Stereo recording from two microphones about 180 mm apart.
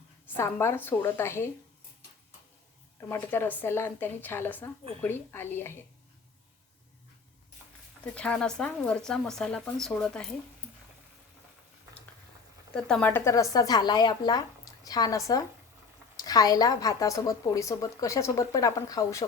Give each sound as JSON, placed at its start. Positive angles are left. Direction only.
{"t": 0.3, "sound": "speech", "side_deg": 15}
{"t": 3.1, "sound": "speech", "side_deg": 10}
{"t": 8.1, "sound": "speech", "side_deg": 5}
{"t": 12.7, "sound": "a woman's voice", "side_deg": 5}